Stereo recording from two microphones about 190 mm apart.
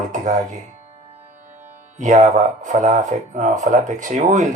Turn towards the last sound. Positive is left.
turn(degrees=-40)  # may be behind; listen again after turning